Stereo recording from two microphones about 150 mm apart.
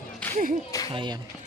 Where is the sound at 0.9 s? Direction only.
35° right (ahead or behind).